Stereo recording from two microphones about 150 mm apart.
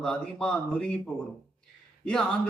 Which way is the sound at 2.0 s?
5° left (ahead or behind).